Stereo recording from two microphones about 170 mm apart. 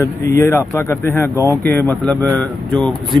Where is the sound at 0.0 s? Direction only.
15° left (ahead or behind).